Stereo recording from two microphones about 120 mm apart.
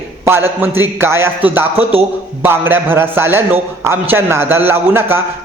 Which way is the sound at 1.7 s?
50° right (ahead or behind).